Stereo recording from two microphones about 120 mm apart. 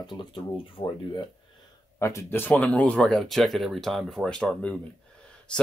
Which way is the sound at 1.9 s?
25° left (ahead or behind).